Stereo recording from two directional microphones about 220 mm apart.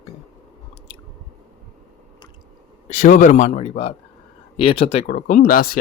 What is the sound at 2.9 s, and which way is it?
Speech, 35° left (ahead or behind).